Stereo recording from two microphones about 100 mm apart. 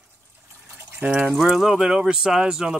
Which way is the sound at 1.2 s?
5° right (ahead or behind).